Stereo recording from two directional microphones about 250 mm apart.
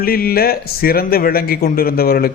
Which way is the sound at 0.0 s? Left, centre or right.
Left.